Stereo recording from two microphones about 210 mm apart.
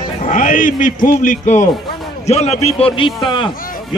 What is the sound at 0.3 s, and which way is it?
A man's voice, 40° left (ahead or behind).